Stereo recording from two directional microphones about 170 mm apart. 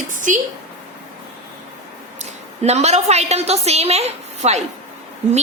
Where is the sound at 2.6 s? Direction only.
40° right (ahead or behind).